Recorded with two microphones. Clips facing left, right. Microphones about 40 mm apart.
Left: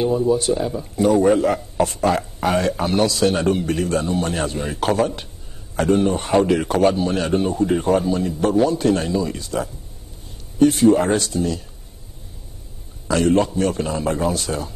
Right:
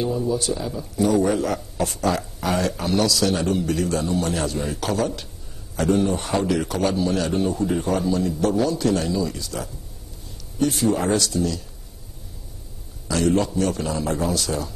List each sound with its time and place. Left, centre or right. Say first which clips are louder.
0.0 s a man's voice: left 5 dB; left
13.1 s a man's voice: left 3 dB; left